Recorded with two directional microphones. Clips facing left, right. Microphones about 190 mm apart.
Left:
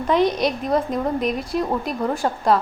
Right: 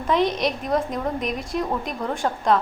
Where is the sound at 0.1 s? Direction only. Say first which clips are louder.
Left 2 dB; centre (ahead or behind).